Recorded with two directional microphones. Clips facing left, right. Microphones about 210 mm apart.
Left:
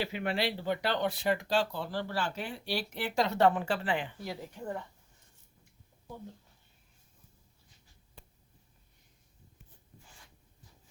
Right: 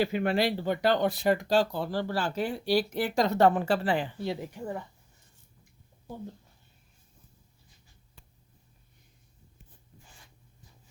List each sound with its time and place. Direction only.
0.0 s speech: 45° right (ahead or behind); by 4.4 s 25° right (ahead or behind)
4.5 s a woman's voice: 5° right (ahead or behind)